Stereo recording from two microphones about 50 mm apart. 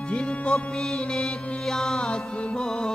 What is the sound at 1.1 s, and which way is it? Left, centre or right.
Music, centre.